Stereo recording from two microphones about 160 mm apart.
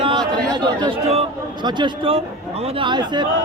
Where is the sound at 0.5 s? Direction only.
25° right (ahead or behind).